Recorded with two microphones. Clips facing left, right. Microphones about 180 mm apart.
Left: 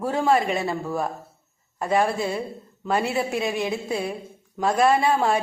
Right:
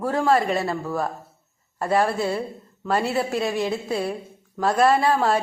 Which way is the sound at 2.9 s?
10° left (ahead or behind).